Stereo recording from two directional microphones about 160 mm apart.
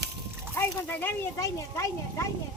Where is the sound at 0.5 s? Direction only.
15° left (ahead or behind).